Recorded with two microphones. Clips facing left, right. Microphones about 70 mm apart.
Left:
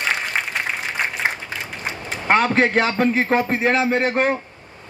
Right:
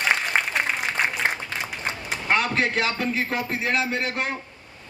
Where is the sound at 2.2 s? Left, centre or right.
Left.